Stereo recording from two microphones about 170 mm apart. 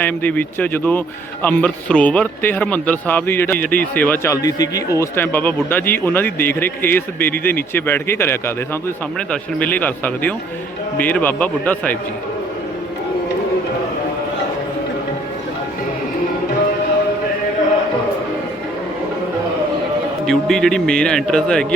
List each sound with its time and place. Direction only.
0.0 s speech: 10° left (ahead or behind)
20.2 s a man's voice: 5° left (ahead or behind)